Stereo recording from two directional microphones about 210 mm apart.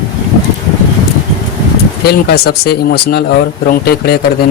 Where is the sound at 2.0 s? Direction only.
50° left (ahead or behind).